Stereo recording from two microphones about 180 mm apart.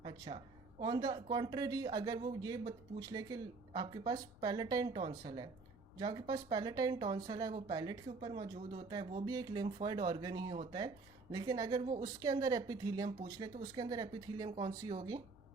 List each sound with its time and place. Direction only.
0.0 s speech: 25° right (ahead or behind)